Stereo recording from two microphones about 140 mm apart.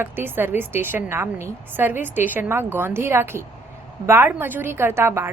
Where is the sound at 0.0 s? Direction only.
15° right (ahead or behind).